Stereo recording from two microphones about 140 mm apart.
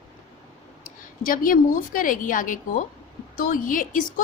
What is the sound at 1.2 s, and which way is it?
A woman's voice, 80° left.